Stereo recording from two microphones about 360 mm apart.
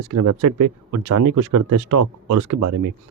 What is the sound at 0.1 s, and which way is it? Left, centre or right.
Speech, right.